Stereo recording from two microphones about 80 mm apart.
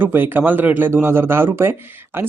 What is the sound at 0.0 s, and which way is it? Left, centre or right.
Speech, right.